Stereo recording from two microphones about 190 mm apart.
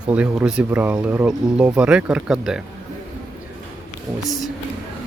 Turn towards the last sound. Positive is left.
turn(degrees=0)  # may be behind; listen again after turning